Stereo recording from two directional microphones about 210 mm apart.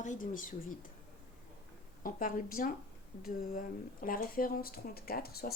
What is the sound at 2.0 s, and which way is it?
Speech, 40° left (ahead or behind).